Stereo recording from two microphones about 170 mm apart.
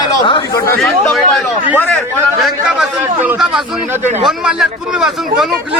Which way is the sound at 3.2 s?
5° right (ahead or behind).